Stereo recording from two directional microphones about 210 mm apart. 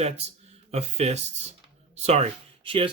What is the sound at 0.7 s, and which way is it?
Speech, 30° right (ahead or behind).